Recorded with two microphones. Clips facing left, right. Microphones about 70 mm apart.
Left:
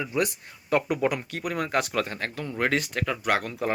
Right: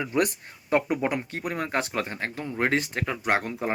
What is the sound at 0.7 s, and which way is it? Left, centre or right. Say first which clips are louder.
Speech: even; right.